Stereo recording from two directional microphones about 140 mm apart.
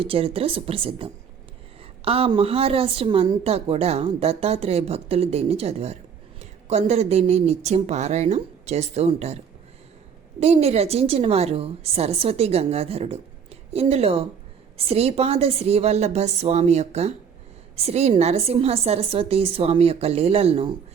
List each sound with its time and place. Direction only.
0.0 s a woman's voice: 40° right (ahead or behind)
10.4 s speech: 50° right (ahead or behind)